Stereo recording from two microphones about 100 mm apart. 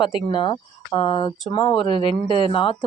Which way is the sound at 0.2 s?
50° left (ahead or behind).